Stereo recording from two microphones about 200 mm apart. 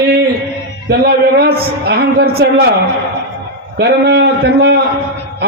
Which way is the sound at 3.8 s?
55° right (ahead or behind).